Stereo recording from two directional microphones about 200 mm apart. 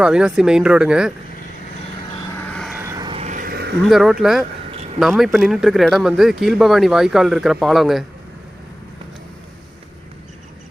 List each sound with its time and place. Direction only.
0.0 s speech: 5° right (ahead or behind)
2.5 s vehicle: centre (ahead or behind)
2.7 s vehicle: 15° right (ahead or behind)
3.2 s a sound: 40° right (ahead or behind)
3.8 s speech: centre (ahead or behind)